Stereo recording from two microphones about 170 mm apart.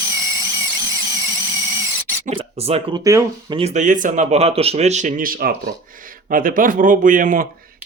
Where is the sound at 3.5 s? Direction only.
40° right (ahead or behind).